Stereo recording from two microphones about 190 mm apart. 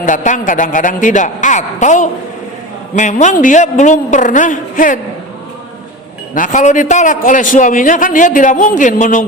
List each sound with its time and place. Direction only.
0.0 s a woman's voice: 40° left (ahead or behind)
6.3 s a man's voice: 40° left (ahead or behind)